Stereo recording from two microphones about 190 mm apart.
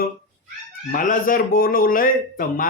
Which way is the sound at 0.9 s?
45° left (ahead or behind).